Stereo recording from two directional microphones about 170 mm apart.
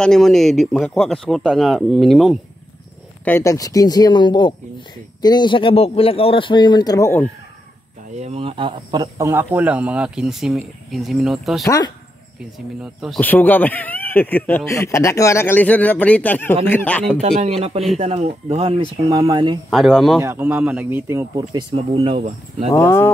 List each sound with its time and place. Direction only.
0.0 s speech: 5° left (ahead or behind)
3.3 s speech: 15° left (ahead or behind)
8.2 s speech: 35° right (ahead or behind); by 11.6 s centre (ahead or behind)
11.6 s speech: 20° left (ahead or behind)
12.5 s speech: centre (ahead or behind)
13.2 s speech: 10° left (ahead or behind)
17.2 s speech: 40° right (ahead or behind)
19.7 s speech: centre (ahead or behind)
20.2 s speech: 15° right (ahead or behind)
21.7 s speech: 35° right (ahead or behind)
22.8 s speech: 15° left (ahead or behind)